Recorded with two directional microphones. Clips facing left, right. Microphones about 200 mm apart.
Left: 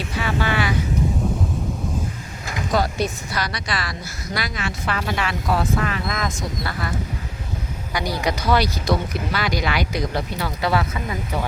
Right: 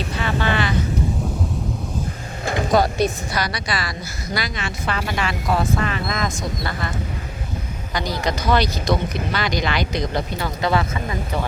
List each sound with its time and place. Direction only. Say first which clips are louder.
0.1 s speech: even; 10° left (ahead or behind)
2.4 s vehicle: right 7 dB; 30° right (ahead or behind)
3.0 s a woman's voice: right 3 dB; 15° right (ahead or behind)
3.7 s speech: right 1 dB; centre (ahead or behind)
7.9 s speech: even; 10° left (ahead or behind)